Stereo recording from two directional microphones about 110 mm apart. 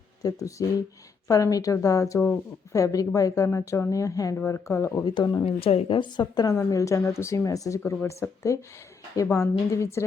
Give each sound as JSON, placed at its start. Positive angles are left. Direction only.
{"t": 0.2, "sound": "a woman's voice", "side_deg": 35}
{"t": 5.0, "sound": "a woman's voice", "side_deg": 40}